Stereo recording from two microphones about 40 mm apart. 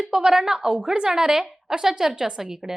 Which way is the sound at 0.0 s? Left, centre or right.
Centre.